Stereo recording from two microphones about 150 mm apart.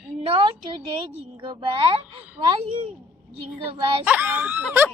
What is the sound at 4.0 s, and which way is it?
Speech, 10° right (ahead or behind).